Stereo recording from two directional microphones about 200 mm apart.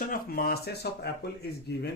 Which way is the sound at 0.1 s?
50° left (ahead or behind).